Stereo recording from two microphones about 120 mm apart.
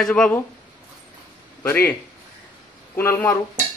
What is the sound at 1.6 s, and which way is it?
Speech, 15° left (ahead or behind).